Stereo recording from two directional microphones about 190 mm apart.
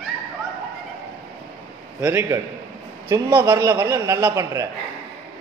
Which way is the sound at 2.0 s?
15° right (ahead or behind).